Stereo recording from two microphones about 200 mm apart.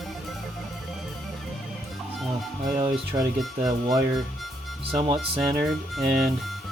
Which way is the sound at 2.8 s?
20° right (ahead or behind).